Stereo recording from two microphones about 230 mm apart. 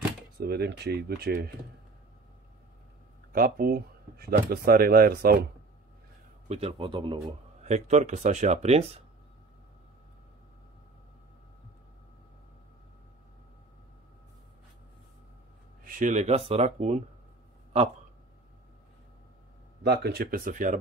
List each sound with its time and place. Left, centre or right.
0.4 s speech: right
3.3 s speech: right
6.5 s speech: right
15.8 s speech: right
19.8 s speech: right